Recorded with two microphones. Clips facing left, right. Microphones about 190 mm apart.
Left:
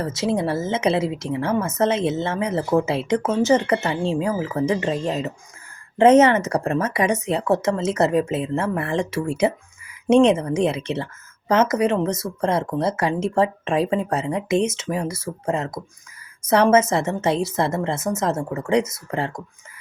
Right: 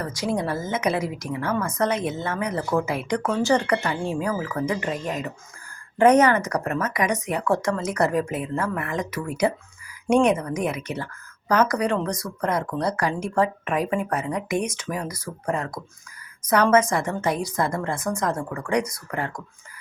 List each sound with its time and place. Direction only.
0.0 s a woman's voice: 25° left (ahead or behind)